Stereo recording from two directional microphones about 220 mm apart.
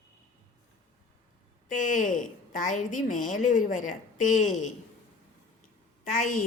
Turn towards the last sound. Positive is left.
turn(degrees=35)  # may be behind; listen again after turning